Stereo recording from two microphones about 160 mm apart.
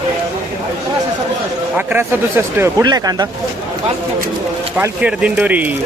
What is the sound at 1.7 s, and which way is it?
A man's voice, 15° right (ahead or behind).